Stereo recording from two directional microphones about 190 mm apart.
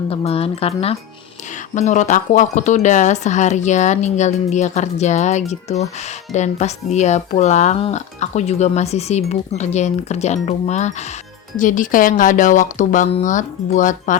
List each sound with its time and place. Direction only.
0.1 s speech: 30° left (ahead or behind)
1.7 s speech: 40° left (ahead or behind)